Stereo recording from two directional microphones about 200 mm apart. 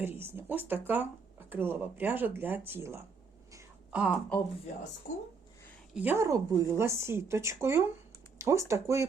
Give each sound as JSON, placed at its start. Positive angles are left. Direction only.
{"t": 0.0, "sound": "a woman's voice", "side_deg": -10}
{"t": 3.5, "sound": "a sound", "side_deg": -15}
{"t": 4.0, "sound": "speech", "side_deg": 0}
{"t": 5.1, "sound": "speech", "side_deg": 40}
{"t": 5.9, "sound": "a woman's voice", "side_deg": -10}